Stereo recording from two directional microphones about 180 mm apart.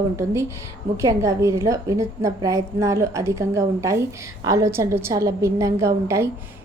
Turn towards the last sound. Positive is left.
turn(degrees=-15)  # may be behind; listen again after turning